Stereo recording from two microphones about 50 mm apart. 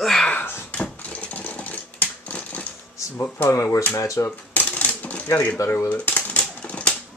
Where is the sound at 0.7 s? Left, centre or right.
Left.